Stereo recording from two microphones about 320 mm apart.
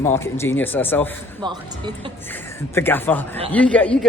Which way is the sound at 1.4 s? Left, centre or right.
Centre.